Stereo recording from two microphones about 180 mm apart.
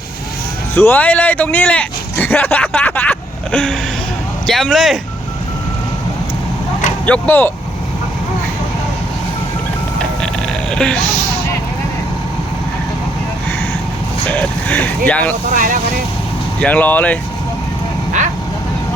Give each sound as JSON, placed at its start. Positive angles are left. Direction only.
{"t": 0.8, "sound": "speech", "side_deg": 10}
{"t": 7.0, "sound": "speech", "side_deg": 10}
{"t": 10.7, "sound": "speech", "side_deg": 5}
{"t": 14.3, "sound": "speech", "side_deg": 10}
{"t": 15.5, "sound": "speech", "side_deg": -50}
{"t": 16.6, "sound": "speech", "side_deg": 10}